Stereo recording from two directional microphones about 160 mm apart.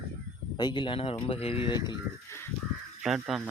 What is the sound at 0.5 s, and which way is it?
Speech, 30° left (ahead or behind).